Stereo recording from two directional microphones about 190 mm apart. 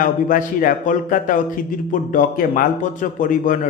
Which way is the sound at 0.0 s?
45° left (ahead or behind).